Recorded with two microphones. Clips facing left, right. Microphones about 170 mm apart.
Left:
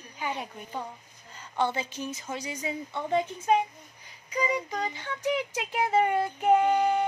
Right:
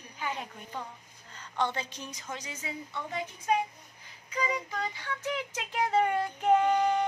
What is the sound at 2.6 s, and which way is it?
Speech, 25° left (ahead or behind).